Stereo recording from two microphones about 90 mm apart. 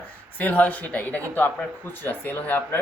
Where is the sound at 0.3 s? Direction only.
20° left (ahead or behind).